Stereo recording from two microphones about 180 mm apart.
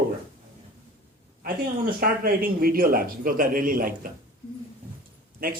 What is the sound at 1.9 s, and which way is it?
Speech, 55° right (ahead or behind).